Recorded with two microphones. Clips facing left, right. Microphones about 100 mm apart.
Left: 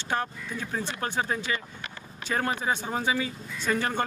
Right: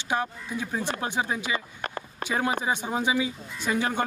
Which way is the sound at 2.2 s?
10° right (ahead or behind).